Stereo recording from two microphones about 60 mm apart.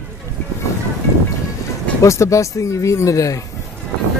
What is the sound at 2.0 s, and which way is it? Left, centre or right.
Speech, left.